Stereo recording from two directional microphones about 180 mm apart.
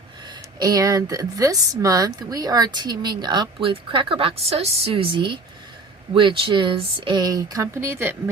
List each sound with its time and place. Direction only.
0.3 s speech: 20° right (ahead or behind)